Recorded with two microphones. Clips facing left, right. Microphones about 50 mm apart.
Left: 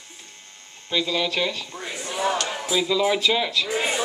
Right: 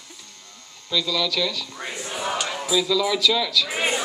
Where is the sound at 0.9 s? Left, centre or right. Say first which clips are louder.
Even; left.